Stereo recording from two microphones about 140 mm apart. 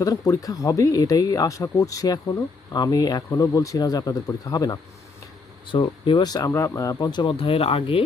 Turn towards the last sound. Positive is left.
turn(degrees=40)  # may be behind; listen again after turning